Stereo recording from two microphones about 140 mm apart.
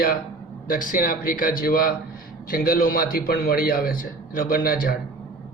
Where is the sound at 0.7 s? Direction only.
80° left.